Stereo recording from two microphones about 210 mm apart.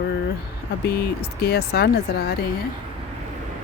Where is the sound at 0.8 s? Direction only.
50° left (ahead or behind).